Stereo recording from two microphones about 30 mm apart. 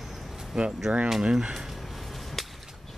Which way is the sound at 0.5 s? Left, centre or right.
Right.